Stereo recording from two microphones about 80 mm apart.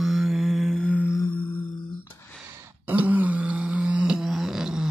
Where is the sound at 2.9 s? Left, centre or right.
Centre.